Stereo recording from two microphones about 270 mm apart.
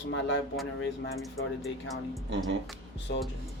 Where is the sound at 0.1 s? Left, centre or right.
Left.